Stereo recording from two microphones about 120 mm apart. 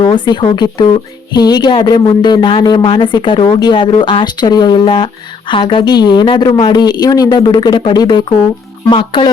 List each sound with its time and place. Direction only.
0.0 s speech: 40° left (ahead or behind)